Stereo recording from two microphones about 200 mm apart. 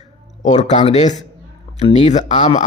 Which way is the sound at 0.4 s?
35° left (ahead or behind).